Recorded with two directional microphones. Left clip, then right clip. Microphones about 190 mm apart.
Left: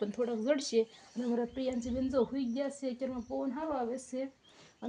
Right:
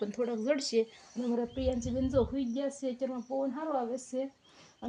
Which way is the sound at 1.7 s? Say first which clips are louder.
Right 3 dB; 20° left (ahead or behind).